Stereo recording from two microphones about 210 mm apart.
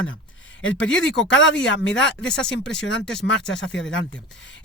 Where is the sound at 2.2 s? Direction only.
5° left (ahead or behind).